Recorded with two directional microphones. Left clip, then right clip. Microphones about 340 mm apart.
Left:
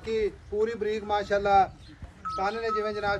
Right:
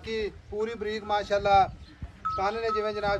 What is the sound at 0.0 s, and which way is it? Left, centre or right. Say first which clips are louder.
A man's voice: left 4 dB; centre.